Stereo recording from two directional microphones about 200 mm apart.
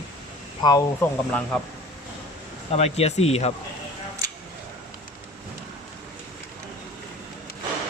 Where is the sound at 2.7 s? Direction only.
30° left (ahead or behind).